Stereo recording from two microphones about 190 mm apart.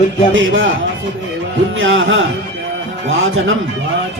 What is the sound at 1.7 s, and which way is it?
Speech, 90° right.